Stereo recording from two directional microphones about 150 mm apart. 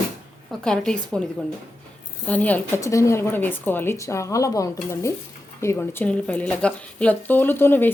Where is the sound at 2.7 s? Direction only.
20° left (ahead or behind).